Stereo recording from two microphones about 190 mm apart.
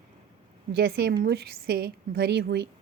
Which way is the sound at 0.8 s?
55° right (ahead or behind).